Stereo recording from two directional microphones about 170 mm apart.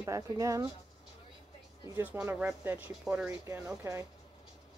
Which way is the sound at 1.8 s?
10° right (ahead or behind).